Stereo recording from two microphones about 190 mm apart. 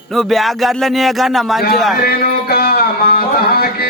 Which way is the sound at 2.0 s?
55° left (ahead or behind).